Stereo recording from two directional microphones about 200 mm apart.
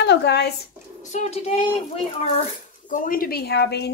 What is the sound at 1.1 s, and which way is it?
Speech, 35° left (ahead or behind).